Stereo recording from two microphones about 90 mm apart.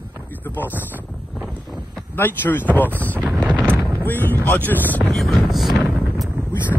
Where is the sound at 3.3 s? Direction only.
15° right (ahead or behind).